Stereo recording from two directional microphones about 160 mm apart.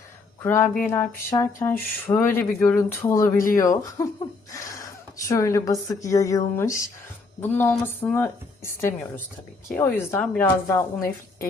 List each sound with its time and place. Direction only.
0.4 s speech: 15° left (ahead or behind)
4.5 s a sound: 20° left (ahead or behind)
5.3 s speech: 20° left (ahead or behind)
7.5 s speech: 10° left (ahead or behind)